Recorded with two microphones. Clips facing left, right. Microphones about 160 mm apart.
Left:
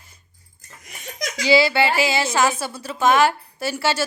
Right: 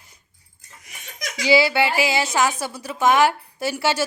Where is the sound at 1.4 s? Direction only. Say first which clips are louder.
Left 1 dB; 15° right (ahead or behind).